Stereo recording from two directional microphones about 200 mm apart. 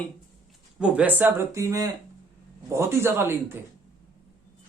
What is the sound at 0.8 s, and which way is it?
Speech, 10° right (ahead or behind).